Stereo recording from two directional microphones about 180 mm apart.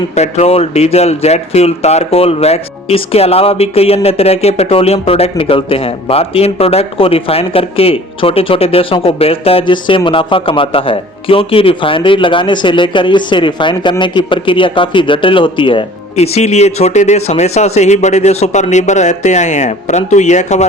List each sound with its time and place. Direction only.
0.2 s speech: 35° left (ahead or behind)